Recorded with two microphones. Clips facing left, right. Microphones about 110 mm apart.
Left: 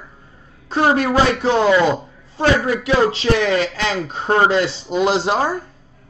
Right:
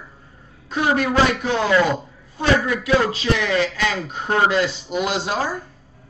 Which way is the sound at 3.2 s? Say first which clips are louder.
Left 3 dB; 35° left (ahead or behind).